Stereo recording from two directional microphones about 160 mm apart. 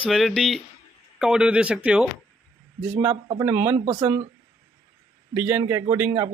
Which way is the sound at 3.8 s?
30° right (ahead or behind).